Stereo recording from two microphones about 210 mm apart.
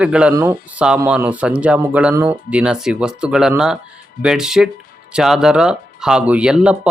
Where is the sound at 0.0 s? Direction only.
5° right (ahead or behind).